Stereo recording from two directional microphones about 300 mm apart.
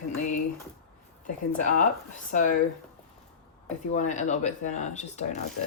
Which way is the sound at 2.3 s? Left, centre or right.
Left.